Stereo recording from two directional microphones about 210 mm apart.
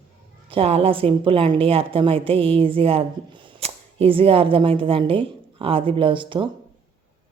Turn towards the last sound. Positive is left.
turn(degrees=-25)  # may be behind; listen again after turning